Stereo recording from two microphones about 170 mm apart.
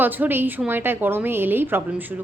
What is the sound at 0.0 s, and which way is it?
A woman's voice, 10° right (ahead or behind).